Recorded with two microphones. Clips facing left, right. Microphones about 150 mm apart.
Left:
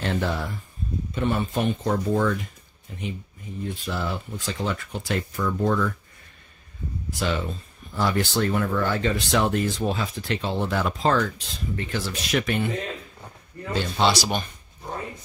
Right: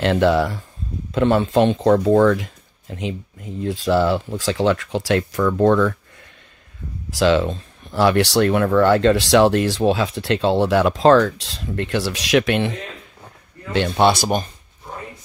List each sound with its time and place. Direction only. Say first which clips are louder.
0.0 s speech: right 10 dB; 90° right
7.1 s speech: right 11 dB; 90° right
13.7 s speech: right 6 dB; 65° right (ahead or behind)